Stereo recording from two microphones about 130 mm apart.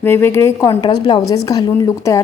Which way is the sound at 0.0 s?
15° left (ahead or behind).